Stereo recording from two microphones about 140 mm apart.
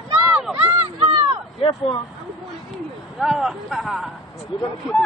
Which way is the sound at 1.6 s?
40° left (ahead or behind).